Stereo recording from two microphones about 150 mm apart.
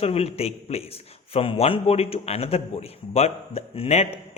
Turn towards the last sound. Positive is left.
turn(degrees=40)  # may be behind; listen again after turning